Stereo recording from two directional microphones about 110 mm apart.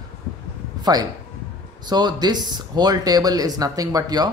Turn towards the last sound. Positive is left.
turn(degrees=-35)  # may be behind; listen again after turning